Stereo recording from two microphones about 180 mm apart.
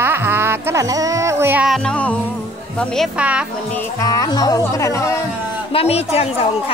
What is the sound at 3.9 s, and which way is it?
A woman's voice, 20° left (ahead or behind).